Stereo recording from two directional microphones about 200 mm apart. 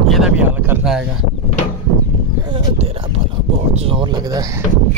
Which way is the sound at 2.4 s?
25° right (ahead or behind).